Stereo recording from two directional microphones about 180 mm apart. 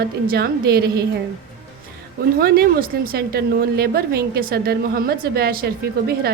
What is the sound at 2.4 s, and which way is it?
A woman's voice, 60° right (ahead or behind).